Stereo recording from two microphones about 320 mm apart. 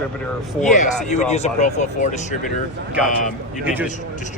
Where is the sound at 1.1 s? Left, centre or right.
Left.